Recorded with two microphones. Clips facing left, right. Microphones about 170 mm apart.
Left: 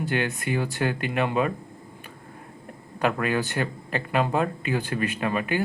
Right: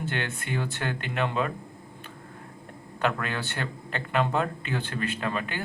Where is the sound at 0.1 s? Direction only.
10° left (ahead or behind).